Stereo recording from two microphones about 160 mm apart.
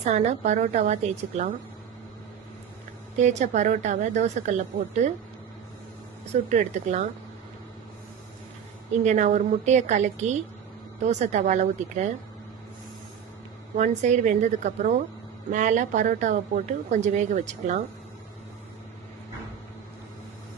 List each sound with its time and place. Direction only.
0.0 s speech: 45° right (ahead or behind)
3.2 s speech: 45° right (ahead or behind)
6.5 s speech: 50° right (ahead or behind)
9.0 s speech: 50° right (ahead or behind)
13.7 s speech: 50° right (ahead or behind)